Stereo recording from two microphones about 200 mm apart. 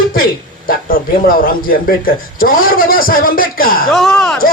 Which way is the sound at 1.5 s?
45° left (ahead or behind).